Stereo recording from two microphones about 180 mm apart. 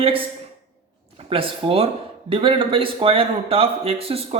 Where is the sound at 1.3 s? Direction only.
30° right (ahead or behind).